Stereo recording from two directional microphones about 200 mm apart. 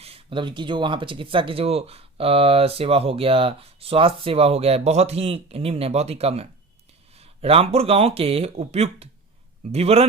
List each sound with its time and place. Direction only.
0.0 s speech: 25° right (ahead or behind)